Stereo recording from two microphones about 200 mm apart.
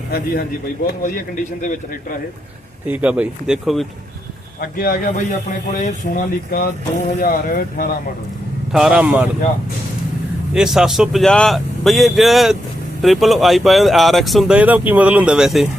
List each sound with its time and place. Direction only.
0.9 s a man's voice: 45° left (ahead or behind)
2.8 s speech: 10° right (ahead or behind)
4.6 s speech: 50° left (ahead or behind)
8.7 s speech: 5° right (ahead or behind)
10.5 s speech: 5° right (ahead or behind)